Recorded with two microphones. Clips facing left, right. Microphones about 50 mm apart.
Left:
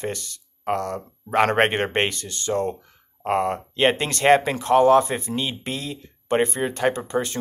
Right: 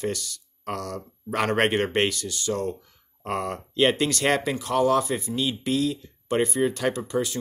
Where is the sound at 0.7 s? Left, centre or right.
Left.